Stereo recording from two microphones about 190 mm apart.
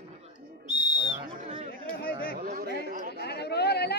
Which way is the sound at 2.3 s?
50° right (ahead or behind).